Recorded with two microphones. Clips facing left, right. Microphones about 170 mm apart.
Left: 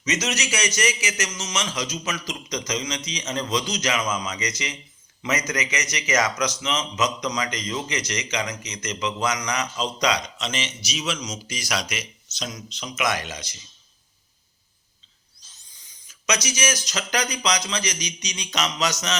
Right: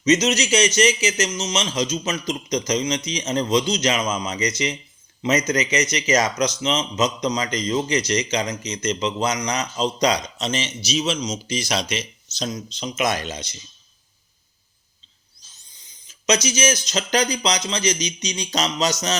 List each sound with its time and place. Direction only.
0.0 s a man's voice: 25° right (ahead or behind)
15.7 s a man's voice: 20° right (ahead or behind)